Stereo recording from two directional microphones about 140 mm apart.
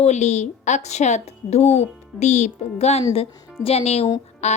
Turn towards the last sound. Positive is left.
turn(degrees=55)  # may be behind; listen again after turning